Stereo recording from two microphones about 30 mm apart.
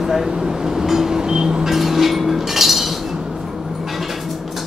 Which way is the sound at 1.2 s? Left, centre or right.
Right.